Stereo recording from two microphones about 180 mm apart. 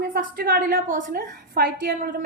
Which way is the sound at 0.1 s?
50° right (ahead or behind).